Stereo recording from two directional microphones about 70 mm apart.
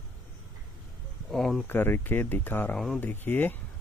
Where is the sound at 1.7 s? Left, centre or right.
Left.